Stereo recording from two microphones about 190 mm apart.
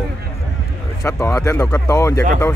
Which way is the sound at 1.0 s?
15° left (ahead or behind).